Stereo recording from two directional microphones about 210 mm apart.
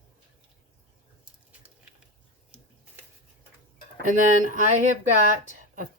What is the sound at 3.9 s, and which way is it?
Speech, 40° right (ahead or behind).